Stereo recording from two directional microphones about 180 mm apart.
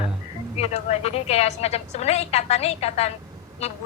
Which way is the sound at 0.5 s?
35° left (ahead or behind).